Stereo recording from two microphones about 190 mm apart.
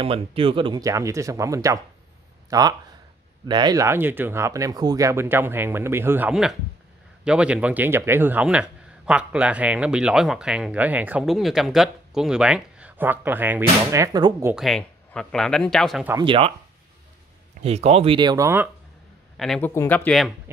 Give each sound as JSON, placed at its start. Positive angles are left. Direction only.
{"t": 0.0, "sound": "a man's voice", "side_deg": -30}
{"t": 14.5, "sound": "speech", "side_deg": 0}
{"t": 16.1, "sound": "speech", "side_deg": -25}
{"t": 17.6, "sound": "speech", "side_deg": -35}
{"t": 19.3, "sound": "a man's voice", "side_deg": 0}
{"t": 19.7, "sound": "speech", "side_deg": 10}